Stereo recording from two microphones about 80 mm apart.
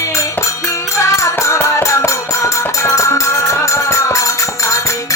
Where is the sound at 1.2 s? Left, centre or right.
Left.